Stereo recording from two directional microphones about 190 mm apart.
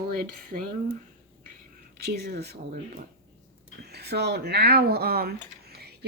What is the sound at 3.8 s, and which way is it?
Speech, 60° right (ahead or behind).